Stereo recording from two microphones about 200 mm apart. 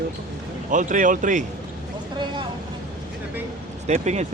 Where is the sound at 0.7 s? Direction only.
40° right (ahead or behind).